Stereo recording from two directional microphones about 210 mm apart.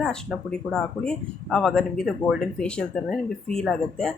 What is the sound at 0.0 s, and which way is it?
Speech, 5° left (ahead or behind).